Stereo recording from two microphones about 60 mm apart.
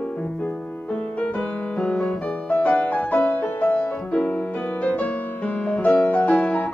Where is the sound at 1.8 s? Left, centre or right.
Centre.